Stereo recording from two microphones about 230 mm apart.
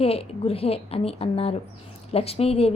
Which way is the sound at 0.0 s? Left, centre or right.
Left.